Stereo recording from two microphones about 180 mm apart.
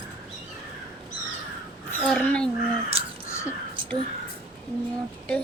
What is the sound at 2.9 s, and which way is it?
Caw, 30° right (ahead or behind).